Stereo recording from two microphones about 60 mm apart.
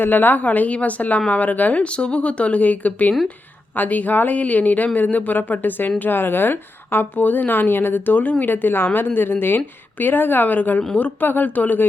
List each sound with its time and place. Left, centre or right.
0.0 s a woman's voice: left